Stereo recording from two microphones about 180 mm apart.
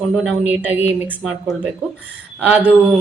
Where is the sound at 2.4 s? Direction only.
10° right (ahead or behind).